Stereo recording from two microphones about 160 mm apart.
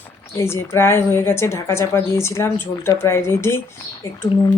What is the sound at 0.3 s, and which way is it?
A woman's voice, 15° left (ahead or behind).